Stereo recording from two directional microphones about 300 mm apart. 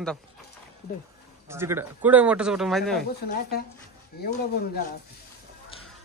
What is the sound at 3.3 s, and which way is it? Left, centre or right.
Speech, left.